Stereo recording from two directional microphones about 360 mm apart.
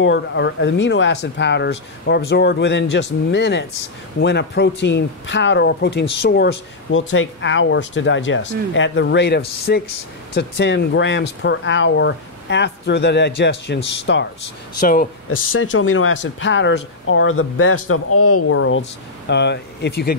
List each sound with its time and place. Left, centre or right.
0.0 s speech: left
15.2 s speech: left